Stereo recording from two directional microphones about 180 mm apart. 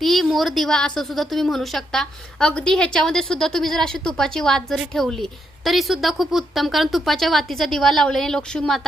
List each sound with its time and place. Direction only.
0.0 s a woman's voice: centre (ahead or behind)